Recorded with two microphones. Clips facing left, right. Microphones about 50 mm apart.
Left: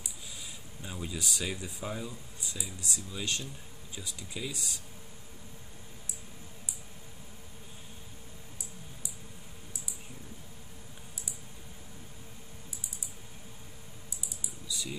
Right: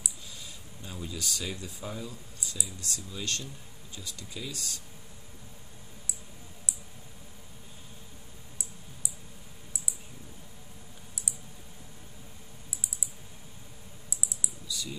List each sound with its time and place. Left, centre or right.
0.8 s speech: centre
14.1 s typing: right
14.7 s a sound: left